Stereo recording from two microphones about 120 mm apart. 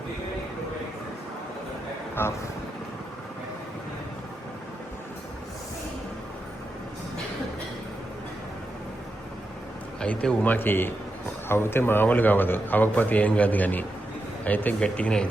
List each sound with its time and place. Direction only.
2.2 s speech: 20° left (ahead or behind)
10.0 s a man's voice: 10° left (ahead or behind)